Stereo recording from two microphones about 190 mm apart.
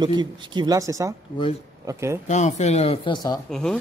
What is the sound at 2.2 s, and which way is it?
Speech, 40° left (ahead or behind).